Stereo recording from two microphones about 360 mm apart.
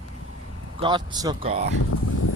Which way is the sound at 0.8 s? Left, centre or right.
Centre.